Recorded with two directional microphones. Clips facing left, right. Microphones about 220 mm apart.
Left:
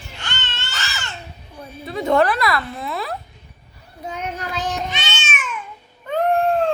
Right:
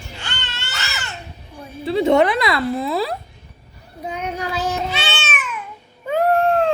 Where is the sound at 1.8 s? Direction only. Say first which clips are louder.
Right 6 dB; 30° right (ahead or behind).